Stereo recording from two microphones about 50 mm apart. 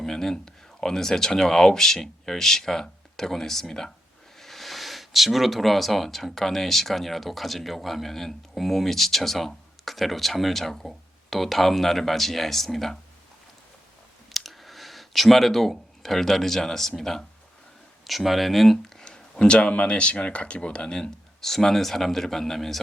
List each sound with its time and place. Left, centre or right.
0.0 s speech: centre
14.3 s a sound: centre
17.0 s speech: centre
19.4 s speech: left
21.0 s speech: centre